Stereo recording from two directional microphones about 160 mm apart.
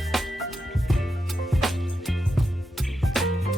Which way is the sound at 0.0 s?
Centre (ahead or behind).